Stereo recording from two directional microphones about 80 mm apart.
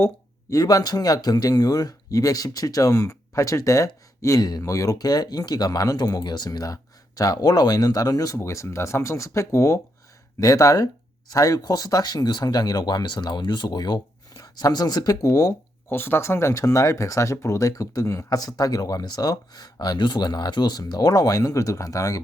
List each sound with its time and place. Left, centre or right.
0.5 s speech: left
4.4 s speech: left
4.6 s speech: left
8.4 s speech: left
15.9 s speech: left